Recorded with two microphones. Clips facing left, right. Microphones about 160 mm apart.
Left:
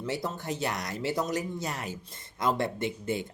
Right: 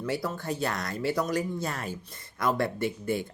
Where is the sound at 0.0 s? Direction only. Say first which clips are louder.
Right 2 dB; 25° left (ahead or behind).